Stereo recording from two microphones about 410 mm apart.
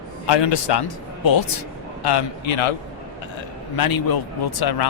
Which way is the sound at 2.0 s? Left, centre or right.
Left.